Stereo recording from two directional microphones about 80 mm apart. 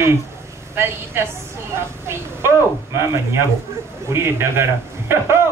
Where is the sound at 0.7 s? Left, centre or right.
Right.